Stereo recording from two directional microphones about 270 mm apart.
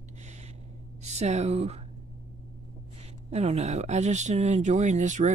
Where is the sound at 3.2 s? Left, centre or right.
Right.